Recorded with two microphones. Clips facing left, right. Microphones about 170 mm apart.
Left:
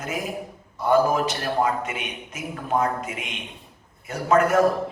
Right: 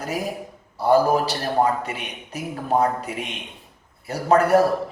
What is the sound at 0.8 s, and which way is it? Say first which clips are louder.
A man's voice: right 2 dB; 35° right (ahead or behind).